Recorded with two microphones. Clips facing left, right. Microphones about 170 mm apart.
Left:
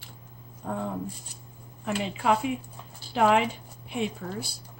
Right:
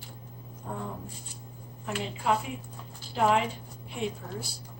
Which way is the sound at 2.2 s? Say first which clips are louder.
Left 4 dB; 70° left (ahead or behind).